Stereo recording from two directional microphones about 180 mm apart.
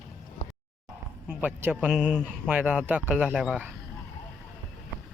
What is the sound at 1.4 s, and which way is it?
A man's voice, 10° right (ahead or behind).